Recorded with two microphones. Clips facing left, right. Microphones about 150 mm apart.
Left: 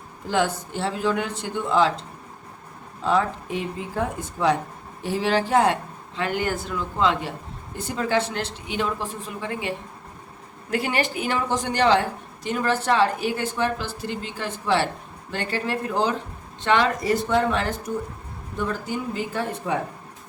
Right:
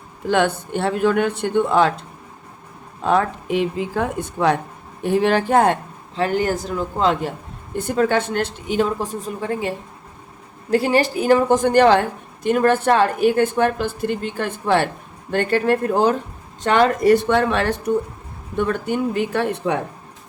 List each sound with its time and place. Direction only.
0.3 s speech: 65° right (ahead or behind)
6.1 s speech: 40° right (ahead or behind)
7.8 s speech: 55° right (ahead or behind)
17.0 s speech: 65° right (ahead or behind)